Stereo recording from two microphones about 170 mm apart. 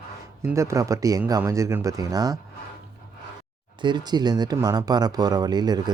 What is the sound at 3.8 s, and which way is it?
Speech, 25° right (ahead or behind).